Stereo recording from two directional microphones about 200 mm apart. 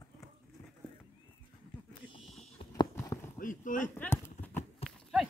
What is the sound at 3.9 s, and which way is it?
Clip-clop, 10° left (ahead or behind).